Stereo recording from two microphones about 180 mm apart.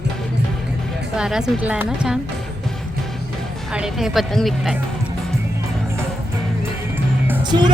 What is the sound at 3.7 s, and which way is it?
Speech, 5° right (ahead or behind).